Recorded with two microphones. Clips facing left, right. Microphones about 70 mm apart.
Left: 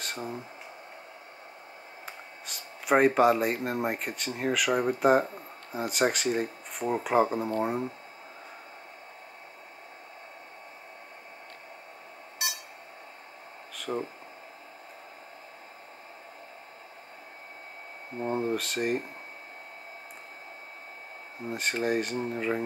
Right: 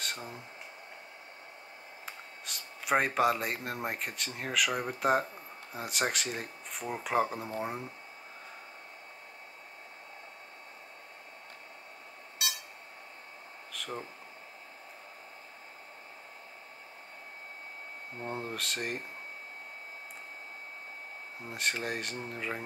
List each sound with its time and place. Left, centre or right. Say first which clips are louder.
0.0 s speech: left 4 dB; centre
2.0 s speech: left 1 dB; centre
13.7 s a sound: left 7 dB; centre
18.2 s speech: left 8 dB; centre
21.5 s speech: left 6 dB; centre